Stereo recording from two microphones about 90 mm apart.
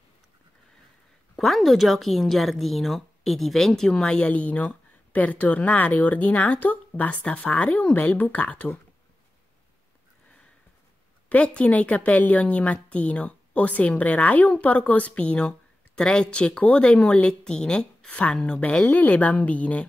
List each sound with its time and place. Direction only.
1.3 s a woman's voice: centre (ahead or behind)
11.2 s a woman's voice: 15° left (ahead or behind)